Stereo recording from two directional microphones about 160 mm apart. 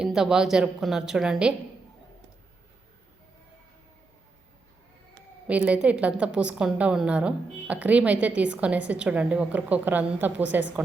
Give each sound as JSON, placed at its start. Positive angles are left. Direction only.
{"t": 0.0, "sound": "a woman's voice", "side_deg": -5}
{"t": 5.5, "sound": "a woman's voice", "side_deg": -10}